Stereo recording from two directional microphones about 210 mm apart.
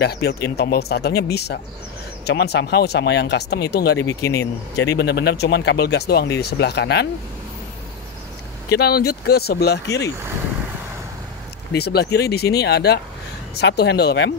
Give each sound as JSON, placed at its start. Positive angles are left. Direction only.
{"t": 0.0, "sound": "speech", "side_deg": 50}
{"t": 4.1, "sound": "speech", "side_deg": 15}
{"t": 4.9, "sound": "speech", "side_deg": 55}
{"t": 8.6, "sound": "speech", "side_deg": 50}
{"t": 11.7, "sound": "speech", "side_deg": 50}